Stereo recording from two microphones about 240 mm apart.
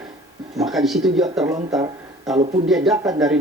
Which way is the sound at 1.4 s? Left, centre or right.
Centre.